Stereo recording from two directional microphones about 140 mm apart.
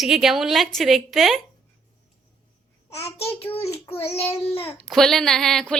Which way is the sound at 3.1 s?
45° left (ahead or behind).